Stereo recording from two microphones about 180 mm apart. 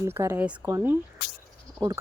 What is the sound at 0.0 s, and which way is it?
Speech, 15° right (ahead or behind).